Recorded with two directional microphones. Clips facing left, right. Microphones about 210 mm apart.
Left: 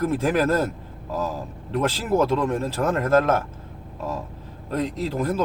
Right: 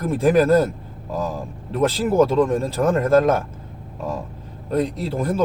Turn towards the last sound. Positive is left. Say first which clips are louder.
# right 1 dB
turn(degrees=-10)  # may be behind; listen again after turning